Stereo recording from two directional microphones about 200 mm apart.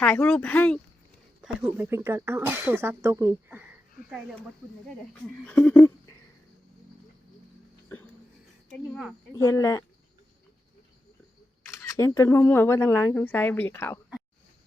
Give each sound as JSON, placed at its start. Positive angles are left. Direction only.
{"t": 0.0, "sound": "speech", "side_deg": 5}
{"t": 1.6, "sound": "speech", "side_deg": -10}
{"t": 5.5, "sound": "speech", "side_deg": 5}
{"t": 8.7, "sound": "speech", "side_deg": 0}
{"t": 9.3, "sound": "speech", "side_deg": 15}
{"t": 11.6, "sound": "speech", "side_deg": 15}